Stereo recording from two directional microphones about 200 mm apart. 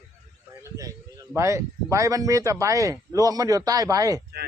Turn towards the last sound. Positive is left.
turn(degrees=-15)  # may be behind; listen again after turning